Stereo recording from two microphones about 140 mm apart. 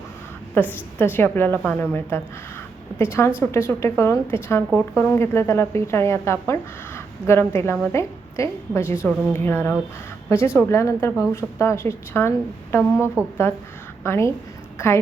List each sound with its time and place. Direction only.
0.5 s a woman's voice: 15° left (ahead or behind)
13.2 s speech: 10° right (ahead or behind)
14.0 s speech: 20° left (ahead or behind)